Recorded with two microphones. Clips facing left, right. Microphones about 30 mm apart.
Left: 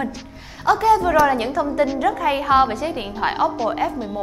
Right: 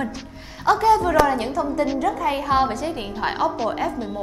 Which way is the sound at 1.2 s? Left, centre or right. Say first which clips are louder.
Left 3 dB; centre.